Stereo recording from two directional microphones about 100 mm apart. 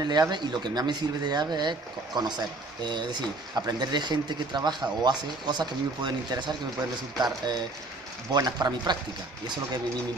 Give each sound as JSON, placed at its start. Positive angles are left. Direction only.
{"t": 0.0, "sound": "speech", "side_deg": -45}